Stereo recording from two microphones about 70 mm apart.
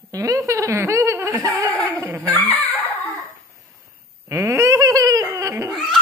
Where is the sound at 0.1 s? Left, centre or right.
Right.